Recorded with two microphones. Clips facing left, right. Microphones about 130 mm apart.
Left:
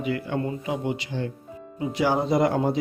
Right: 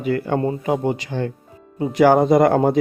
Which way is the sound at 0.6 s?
50° right (ahead or behind).